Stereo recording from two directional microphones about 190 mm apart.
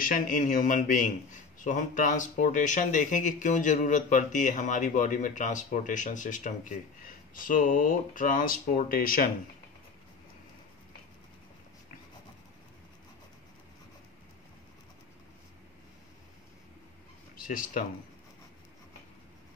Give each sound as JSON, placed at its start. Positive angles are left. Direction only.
{"t": 0.0, "sound": "a man's voice", "side_deg": 45}
{"t": 17.4, "sound": "speech", "side_deg": 45}